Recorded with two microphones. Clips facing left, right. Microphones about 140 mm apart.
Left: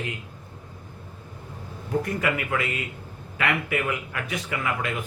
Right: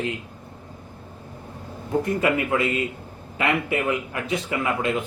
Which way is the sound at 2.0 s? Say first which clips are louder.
Right 5 dB; 25° right (ahead or behind).